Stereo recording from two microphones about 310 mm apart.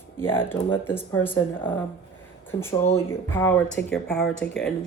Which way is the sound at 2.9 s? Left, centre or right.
Centre.